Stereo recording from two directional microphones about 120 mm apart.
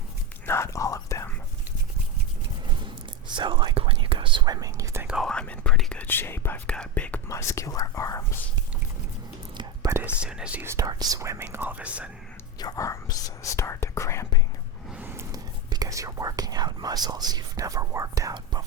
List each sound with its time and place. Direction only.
0.4 s whispering: 20° left (ahead or behind)
3.3 s whispering: 40° right (ahead or behind); by 5.0 s 25° right (ahead or behind)
5.0 s whispering: 5° right (ahead or behind)
5.3 s whispering: 10° left (ahead or behind)
6.0 s whispering: 20° left (ahead or behind)
7.3 s whispering: 25° left (ahead or behind)
9.9 s speech: 10° right (ahead or behind)
10.7 s speech: 30° right (ahead or behind); by 12.1 s 10° right (ahead or behind)
12.5 s speech: 30° left (ahead or behind)
14.8 s a sound: 15° right (ahead or behind)
15.3 s speech: 30° right (ahead or behind)